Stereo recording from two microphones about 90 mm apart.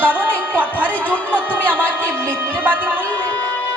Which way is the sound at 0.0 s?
20° right (ahead or behind).